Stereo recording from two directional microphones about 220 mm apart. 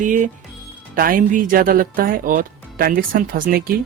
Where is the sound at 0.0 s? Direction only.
35° right (ahead or behind).